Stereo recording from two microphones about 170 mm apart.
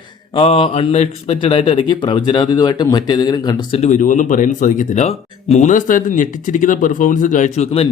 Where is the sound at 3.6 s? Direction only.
40° left (ahead or behind).